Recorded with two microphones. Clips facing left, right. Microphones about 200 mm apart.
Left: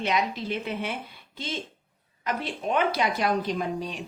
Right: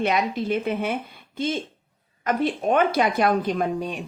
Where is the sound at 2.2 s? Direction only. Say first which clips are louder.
Right 7 dB; 50° right (ahead or behind).